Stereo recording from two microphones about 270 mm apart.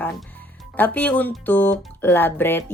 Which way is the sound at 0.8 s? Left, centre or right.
Centre.